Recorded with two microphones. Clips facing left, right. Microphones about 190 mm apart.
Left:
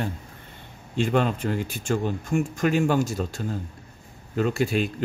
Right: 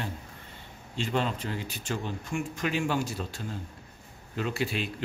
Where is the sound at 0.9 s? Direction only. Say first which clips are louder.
Left 7 dB; 55° left (ahead or behind).